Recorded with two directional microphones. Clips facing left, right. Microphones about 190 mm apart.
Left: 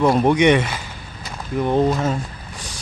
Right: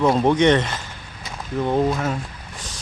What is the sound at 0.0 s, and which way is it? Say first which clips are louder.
Speech: left 1 dB; 10° left (ahead or behind).